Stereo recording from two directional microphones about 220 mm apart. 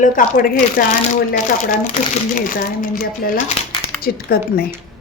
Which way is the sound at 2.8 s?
40° left (ahead or behind).